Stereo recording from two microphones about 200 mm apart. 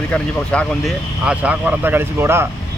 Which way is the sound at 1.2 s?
5° right (ahead or behind).